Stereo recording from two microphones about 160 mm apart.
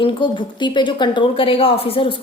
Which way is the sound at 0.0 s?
30° left (ahead or behind).